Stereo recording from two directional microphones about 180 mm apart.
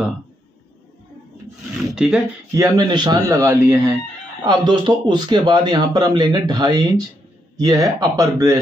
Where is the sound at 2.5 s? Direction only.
20° right (ahead or behind).